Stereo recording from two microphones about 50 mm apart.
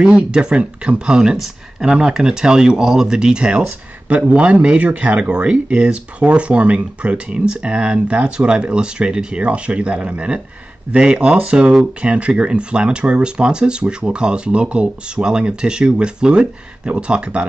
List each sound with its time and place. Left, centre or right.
0.0 s speech: centre